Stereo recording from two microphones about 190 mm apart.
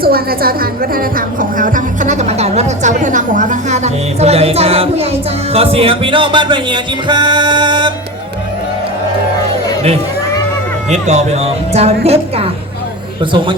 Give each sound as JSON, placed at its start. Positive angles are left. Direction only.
{"t": 0.0, "sound": "a woman's voice", "side_deg": -50}
{"t": 5.5, "sound": "music", "side_deg": -30}
{"t": 10.8, "sound": "a woman's voice", "side_deg": -35}